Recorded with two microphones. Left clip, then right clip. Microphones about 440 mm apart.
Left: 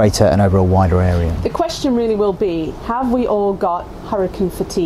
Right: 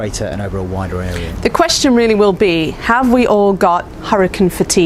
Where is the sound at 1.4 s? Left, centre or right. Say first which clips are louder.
Right 7 dB; right.